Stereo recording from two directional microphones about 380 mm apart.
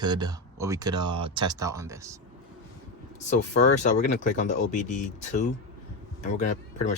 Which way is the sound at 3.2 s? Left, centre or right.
Centre.